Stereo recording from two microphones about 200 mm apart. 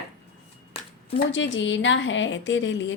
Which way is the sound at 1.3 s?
65° left (ahead or behind).